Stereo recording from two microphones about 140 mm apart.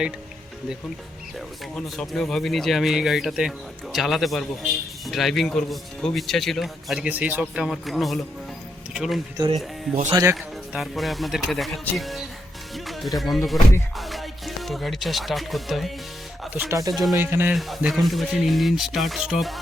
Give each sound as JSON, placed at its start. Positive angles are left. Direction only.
{"t": 1.7, "sound": "a man's voice", "side_deg": 5}
{"t": 10.1, "sound": "speech", "side_deg": -25}
{"t": 10.3, "sound": "a man's voice", "side_deg": 0}
{"t": 16.6, "sound": "speech", "side_deg": -25}
{"t": 16.9, "sound": "a man's voice", "side_deg": 0}
{"t": 17.2, "sound": "speech", "side_deg": -15}
{"t": 17.5, "sound": "a man's voice", "side_deg": 0}